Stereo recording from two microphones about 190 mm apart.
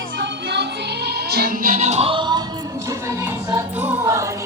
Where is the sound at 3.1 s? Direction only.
15° right (ahead or behind).